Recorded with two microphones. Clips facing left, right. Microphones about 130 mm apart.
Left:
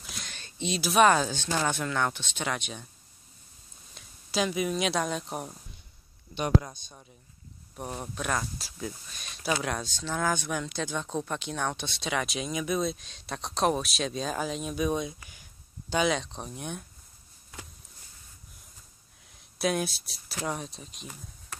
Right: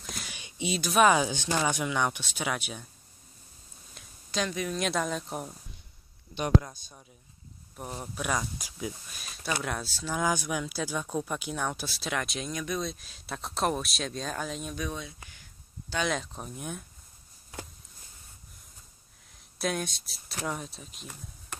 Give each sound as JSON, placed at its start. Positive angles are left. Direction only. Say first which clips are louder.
{"t": 0.1, "sound": "a sound", "louder": "right 2 dB", "side_deg": -10}
{"t": 0.7, "sound": "speech", "louder": "left 1 dB", "side_deg": 0}
{"t": 3.9, "sound": "speech", "louder": "left 3 dB", "side_deg": 5}
{"t": 6.6, "sound": "speech", "louder": "left 1 dB", "side_deg": -5}
{"t": 14.9, "sound": "speech", "louder": "left 8 dB", "side_deg": 15}
{"t": 16.1, "sound": "speech", "louder": "left 3 dB", "side_deg": -5}
{"t": 19.6, "sound": "speech", "louder": "left 3 dB", "side_deg": 5}